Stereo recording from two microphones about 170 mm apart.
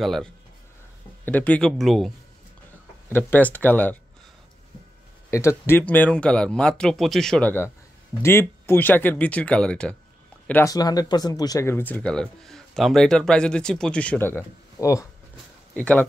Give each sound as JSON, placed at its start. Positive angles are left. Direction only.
{"t": 0.0, "sound": "speech", "side_deg": 0}
{"t": 3.1, "sound": "speech", "side_deg": 10}
{"t": 5.3, "sound": "speech", "side_deg": 15}
{"t": 10.7, "sound": "speech", "side_deg": 20}